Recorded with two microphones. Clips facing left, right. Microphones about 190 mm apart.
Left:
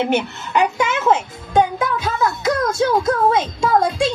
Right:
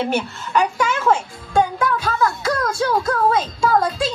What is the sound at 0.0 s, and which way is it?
Music, 20° left (ahead or behind).